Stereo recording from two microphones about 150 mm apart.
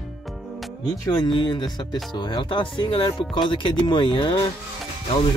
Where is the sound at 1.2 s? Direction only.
30° left (ahead or behind).